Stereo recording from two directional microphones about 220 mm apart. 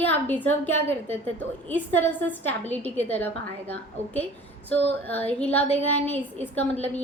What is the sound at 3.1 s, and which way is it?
A woman's voice, 10° left (ahead or behind).